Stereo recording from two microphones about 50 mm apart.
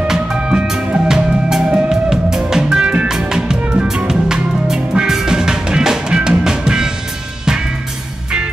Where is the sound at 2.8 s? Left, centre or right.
Right.